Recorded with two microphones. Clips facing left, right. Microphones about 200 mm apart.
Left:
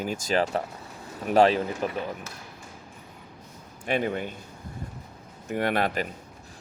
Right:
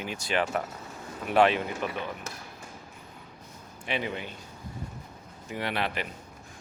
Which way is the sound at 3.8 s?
50° left (ahead or behind).